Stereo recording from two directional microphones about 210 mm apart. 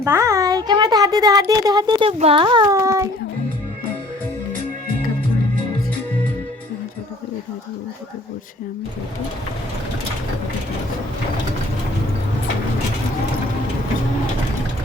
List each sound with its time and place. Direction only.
0.0 s speech: 15° right (ahead or behind)